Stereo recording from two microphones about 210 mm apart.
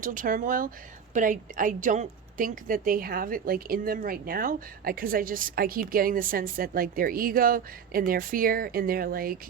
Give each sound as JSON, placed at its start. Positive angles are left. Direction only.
{"t": 0.0, "sound": "speech", "side_deg": -40}